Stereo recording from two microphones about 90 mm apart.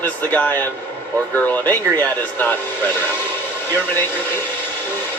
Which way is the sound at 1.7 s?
20° left (ahead or behind).